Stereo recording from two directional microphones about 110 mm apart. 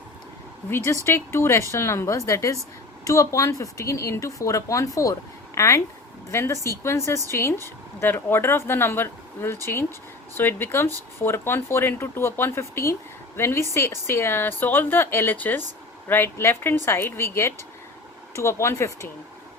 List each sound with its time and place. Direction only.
1.0 s speech: 25° left (ahead or behind)